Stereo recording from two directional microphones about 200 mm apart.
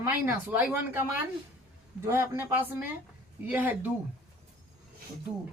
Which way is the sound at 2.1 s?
10° right (ahead or behind).